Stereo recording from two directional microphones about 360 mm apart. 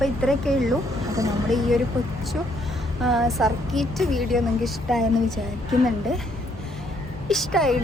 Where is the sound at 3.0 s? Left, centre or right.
Centre.